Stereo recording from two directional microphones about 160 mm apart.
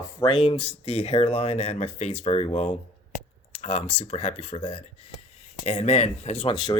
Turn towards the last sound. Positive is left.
turn(degrees=40)  # may be behind; listen again after turning